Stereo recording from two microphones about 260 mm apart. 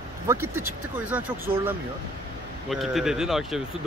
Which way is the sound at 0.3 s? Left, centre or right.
Centre.